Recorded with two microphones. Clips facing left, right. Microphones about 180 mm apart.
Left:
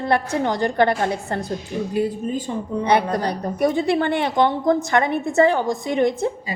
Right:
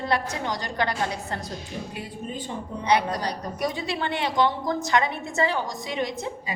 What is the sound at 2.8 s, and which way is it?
A woman's voice, 55° left (ahead or behind).